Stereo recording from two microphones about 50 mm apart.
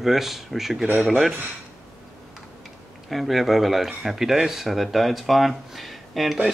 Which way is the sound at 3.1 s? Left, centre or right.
Centre.